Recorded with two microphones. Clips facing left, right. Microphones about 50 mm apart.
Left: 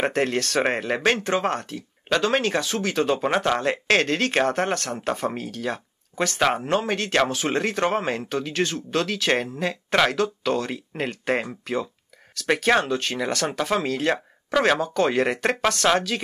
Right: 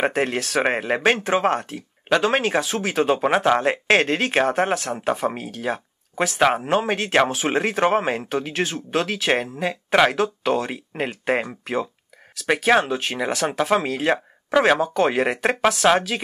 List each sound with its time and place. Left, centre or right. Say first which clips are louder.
0.0 s speech: right 1 dB; centre
12.4 s speech: right 2 dB; centre